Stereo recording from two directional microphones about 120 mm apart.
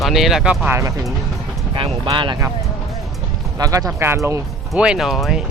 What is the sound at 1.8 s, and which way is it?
Speech, 45° right (ahead or behind).